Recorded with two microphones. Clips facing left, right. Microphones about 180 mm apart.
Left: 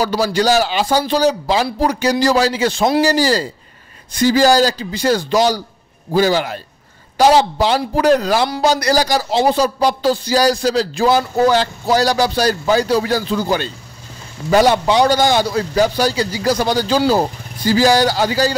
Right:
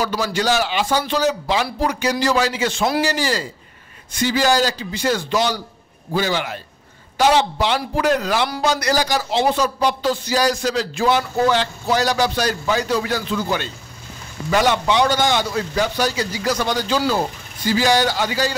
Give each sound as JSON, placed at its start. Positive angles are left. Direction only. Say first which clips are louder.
{"t": 0.0, "sound": "a man's voice", "louder": "left 5 dB", "side_deg": 35}